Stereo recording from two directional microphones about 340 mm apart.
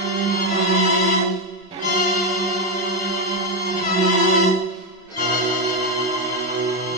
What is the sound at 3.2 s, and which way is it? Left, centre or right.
Music, centre.